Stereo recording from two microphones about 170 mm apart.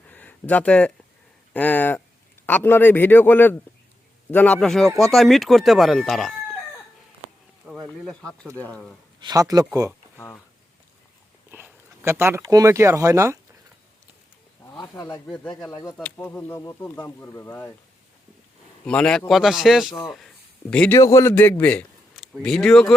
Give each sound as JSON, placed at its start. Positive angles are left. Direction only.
{"t": 0.1, "sound": "speech", "side_deg": 10}
{"t": 7.6, "sound": "a sound", "side_deg": -10}
{"t": 8.0, "sound": "speech", "side_deg": 5}
{"t": 9.2, "sound": "speech", "side_deg": -20}
{"t": 10.2, "sound": "speech", "side_deg": 10}
{"t": 11.5, "sound": "speech", "side_deg": -10}
{"t": 14.6, "sound": "speech", "side_deg": 25}
{"t": 15.3, "sound": "speech", "side_deg": 5}
{"t": 15.7, "sound": "speech", "side_deg": 25}
{"t": 16.0, "sound": "speech", "side_deg": 10}
{"t": 18.9, "sound": "speech", "side_deg": 5}
{"t": 21.0, "sound": "a man's voice", "side_deg": 15}